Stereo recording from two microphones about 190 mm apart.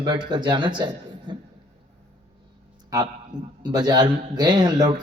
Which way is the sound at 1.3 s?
25° right (ahead or behind).